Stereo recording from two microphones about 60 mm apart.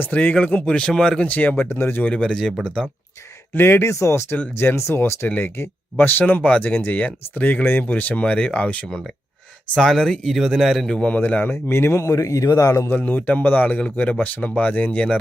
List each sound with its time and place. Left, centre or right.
0.0 s speech: left
1.3 s speech: left
1.6 s speech: left
2.0 s speech: centre
3.5 s speech: left
9.7 s a man's voice: centre
10.9 s speech: centre
11.4 s speech: left
12.1 s a man's voice: left
12.9 s speech: left